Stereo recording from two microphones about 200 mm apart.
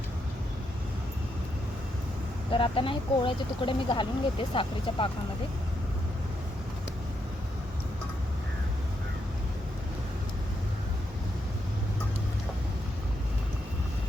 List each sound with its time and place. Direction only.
2.5 s speech: 25° left (ahead or behind)